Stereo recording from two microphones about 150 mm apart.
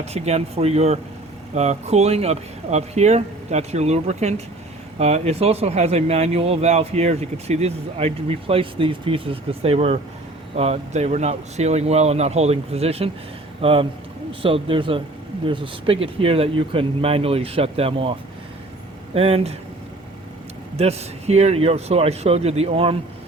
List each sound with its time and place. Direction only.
0.0 s speech: 45° right (ahead or behind)
20.7 s speech: 45° right (ahead or behind)